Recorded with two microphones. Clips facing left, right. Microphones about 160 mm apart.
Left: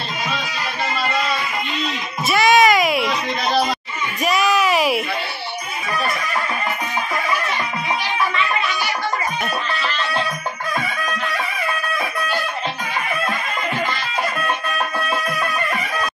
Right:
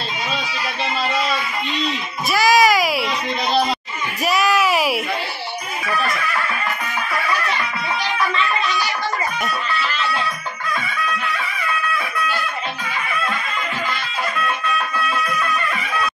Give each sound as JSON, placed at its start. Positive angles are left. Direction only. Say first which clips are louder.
{"t": 2.3, "sound": "music", "louder": "left 1 dB", "side_deg": 0}
{"t": 4.2, "sound": "a sound", "louder": "even", "side_deg": 0}
{"t": 15.0, "sound": "music", "louder": "even", "side_deg": 40}